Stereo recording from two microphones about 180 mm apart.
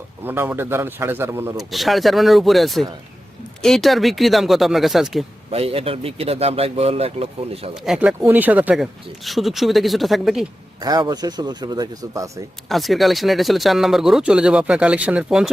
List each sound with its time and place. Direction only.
0.3 s a man's voice: 10° right (ahead or behind)
1.5 s speech: centre (ahead or behind)
5.5 s speech: 35° right (ahead or behind)
7.9 s a man's voice: 5° right (ahead or behind)
10.8 s speech: 20° right (ahead or behind)
12.6 s speech: centre (ahead or behind)